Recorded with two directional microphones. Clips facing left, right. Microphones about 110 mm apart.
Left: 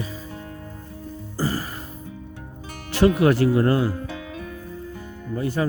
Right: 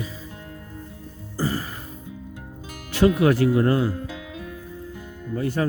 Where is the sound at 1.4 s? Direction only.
35° left (ahead or behind).